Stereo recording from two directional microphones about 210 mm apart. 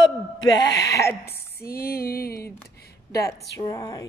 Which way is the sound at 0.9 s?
15° left (ahead or behind).